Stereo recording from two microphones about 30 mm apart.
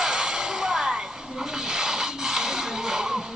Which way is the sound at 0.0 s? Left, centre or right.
Right.